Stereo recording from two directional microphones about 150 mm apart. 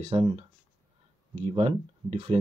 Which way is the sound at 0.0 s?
40° right (ahead or behind).